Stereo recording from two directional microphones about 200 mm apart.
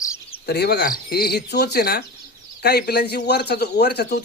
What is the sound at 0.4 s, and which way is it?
Speech, 55° left (ahead or behind).